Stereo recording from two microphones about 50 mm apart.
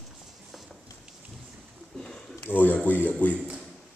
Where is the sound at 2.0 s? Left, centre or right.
Centre.